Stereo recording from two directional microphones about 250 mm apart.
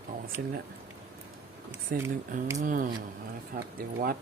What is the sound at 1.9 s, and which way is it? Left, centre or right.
Speech, right.